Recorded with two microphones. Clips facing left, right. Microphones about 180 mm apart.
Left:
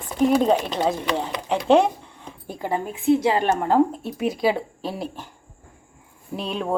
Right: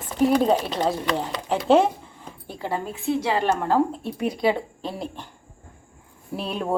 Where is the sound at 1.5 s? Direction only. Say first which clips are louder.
Left 1 dB; 5° right (ahead or behind).